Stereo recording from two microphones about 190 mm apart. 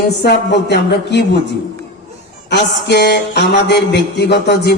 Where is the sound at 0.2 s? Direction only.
60° left (ahead or behind).